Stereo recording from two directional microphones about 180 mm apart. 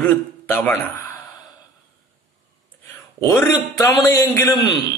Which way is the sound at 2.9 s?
15° left (ahead or behind).